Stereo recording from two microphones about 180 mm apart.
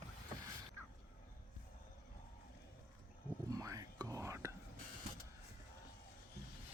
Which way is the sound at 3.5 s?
20° right (ahead or behind).